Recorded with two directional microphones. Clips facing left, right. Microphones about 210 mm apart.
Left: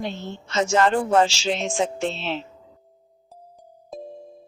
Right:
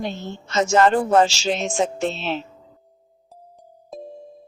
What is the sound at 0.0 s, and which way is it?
A woman's voice, 40° right (ahead or behind).